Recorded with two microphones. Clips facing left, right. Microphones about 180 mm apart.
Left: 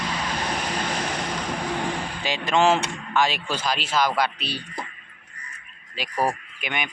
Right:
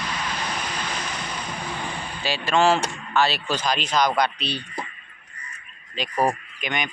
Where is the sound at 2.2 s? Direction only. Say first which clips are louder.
Right 1 dB; 20° left (ahead or behind).